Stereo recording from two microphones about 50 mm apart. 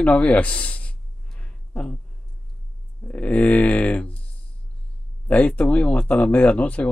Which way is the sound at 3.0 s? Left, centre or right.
Left.